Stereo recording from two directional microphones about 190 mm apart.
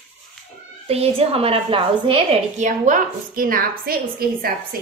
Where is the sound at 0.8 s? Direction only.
30° right (ahead or behind).